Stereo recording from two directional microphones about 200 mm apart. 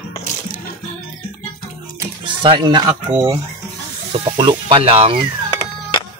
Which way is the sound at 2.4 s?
25° right (ahead or behind).